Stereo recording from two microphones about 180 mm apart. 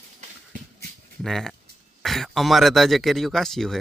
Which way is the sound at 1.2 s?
Centre (ahead or behind).